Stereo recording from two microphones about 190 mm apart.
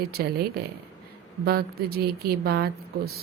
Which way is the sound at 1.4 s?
55° right (ahead or behind).